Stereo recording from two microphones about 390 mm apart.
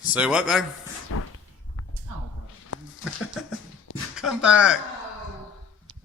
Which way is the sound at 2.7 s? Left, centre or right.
Left.